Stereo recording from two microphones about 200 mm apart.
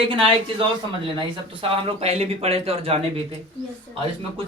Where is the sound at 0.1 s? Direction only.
25° right (ahead or behind).